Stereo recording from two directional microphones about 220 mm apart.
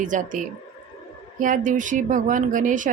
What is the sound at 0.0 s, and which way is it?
A woman's voice, 35° right (ahead or behind).